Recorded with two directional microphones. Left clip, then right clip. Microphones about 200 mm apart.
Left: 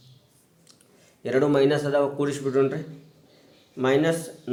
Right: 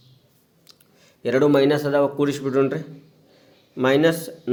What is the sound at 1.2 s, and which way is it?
A man's voice, 40° right (ahead or behind).